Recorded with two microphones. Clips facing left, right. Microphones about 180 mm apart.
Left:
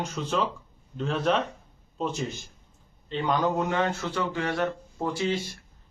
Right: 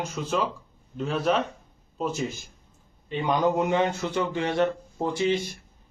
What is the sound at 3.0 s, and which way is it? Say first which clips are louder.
A man's voice: right 2 dB; 15° right (ahead or behind).